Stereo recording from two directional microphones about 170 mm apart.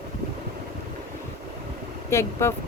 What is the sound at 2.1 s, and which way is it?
Speech, 15° left (ahead or behind).